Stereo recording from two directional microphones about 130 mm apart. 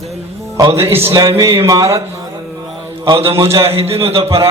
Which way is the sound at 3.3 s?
20° right (ahead or behind).